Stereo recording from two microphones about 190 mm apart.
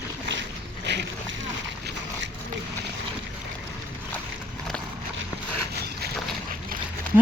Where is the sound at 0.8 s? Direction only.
65° right (ahead or behind).